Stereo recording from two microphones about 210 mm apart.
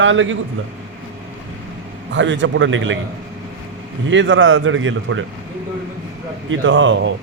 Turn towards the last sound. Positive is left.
turn(degrees=-60)  # may be behind; listen again after turning